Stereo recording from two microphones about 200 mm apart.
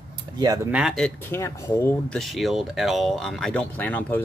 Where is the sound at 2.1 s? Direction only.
Centre (ahead or behind).